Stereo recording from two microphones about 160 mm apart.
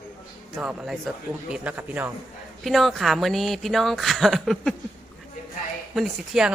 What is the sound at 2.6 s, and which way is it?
Speech, centre (ahead or behind).